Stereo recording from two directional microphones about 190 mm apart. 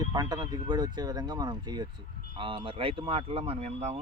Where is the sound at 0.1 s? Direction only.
20° right (ahead or behind).